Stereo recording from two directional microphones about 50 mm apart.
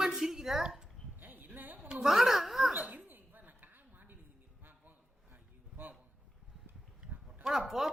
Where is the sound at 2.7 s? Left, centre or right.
Right.